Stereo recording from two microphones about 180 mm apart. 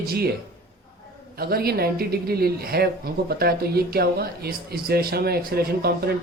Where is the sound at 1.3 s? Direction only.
60° right (ahead or behind).